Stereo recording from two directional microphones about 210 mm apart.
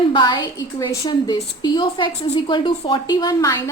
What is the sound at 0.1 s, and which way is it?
A woman's voice, 25° left (ahead or behind).